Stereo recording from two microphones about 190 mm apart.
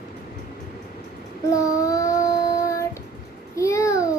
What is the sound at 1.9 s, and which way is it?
Child singing, 15° left (ahead or behind).